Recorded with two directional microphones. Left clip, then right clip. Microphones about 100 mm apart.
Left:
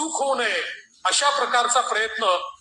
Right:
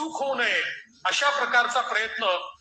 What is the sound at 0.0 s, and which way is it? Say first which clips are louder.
A man's voice: left 3 dB; 40° left (ahead or behind).